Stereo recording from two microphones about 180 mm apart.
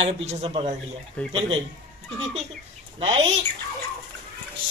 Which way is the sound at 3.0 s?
30° right (ahead or behind).